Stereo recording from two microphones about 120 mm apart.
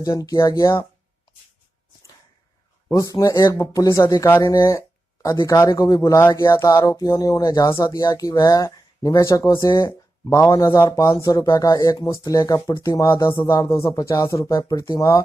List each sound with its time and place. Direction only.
0.0 s speech: 30° left (ahead or behind)
2.9 s speech: 30° left (ahead or behind)
11.1 s speech: 40° left (ahead or behind)
11.3 s speech: 25° left (ahead or behind)